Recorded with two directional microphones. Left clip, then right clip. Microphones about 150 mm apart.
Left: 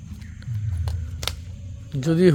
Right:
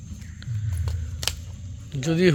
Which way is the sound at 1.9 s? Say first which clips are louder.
Left 2 dB; 45° left (ahead or behind).